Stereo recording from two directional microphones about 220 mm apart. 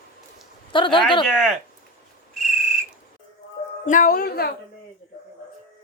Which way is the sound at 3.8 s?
35° left (ahead or behind).